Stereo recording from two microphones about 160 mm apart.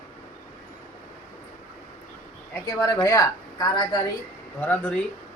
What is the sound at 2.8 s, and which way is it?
Speech, 20° left (ahead or behind).